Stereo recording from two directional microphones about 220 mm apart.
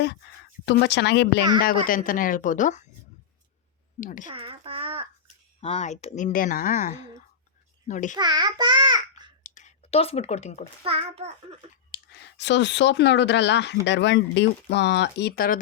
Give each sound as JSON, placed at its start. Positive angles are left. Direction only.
{"t": 0.6, "sound": "speech", "side_deg": 50}
{"t": 1.6, "sound": "speech", "side_deg": 40}
{"t": 4.0, "sound": "speech", "side_deg": 35}
{"t": 4.3, "sound": "a sound", "side_deg": -25}
{"t": 5.5, "sound": "speech", "side_deg": 25}
{"t": 8.1, "sound": "a child's voice", "side_deg": -20}
{"t": 9.4, "sound": "a sound", "side_deg": 35}
{"t": 10.8, "sound": "a child's voice", "side_deg": -25}
{"t": 11.9, "sound": "speech", "side_deg": 50}